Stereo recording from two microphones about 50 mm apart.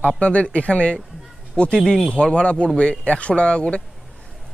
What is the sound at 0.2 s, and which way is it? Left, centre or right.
A man's voice, left.